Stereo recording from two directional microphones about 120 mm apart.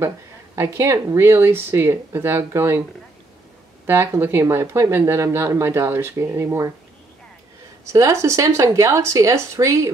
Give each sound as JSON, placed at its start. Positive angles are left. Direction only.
{"t": 0.6, "sound": "speech", "side_deg": -25}
{"t": 3.8, "sound": "speech", "side_deg": -20}
{"t": 7.9, "sound": "speech", "side_deg": -25}